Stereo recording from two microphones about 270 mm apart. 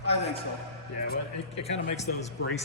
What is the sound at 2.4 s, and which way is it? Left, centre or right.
Speech, left.